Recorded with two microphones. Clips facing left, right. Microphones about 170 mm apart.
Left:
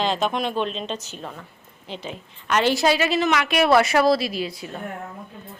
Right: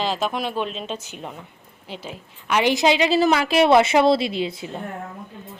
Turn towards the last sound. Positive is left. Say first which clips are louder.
# right 3 dB
turn(degrees=-20)  # may be behind; listen again after turning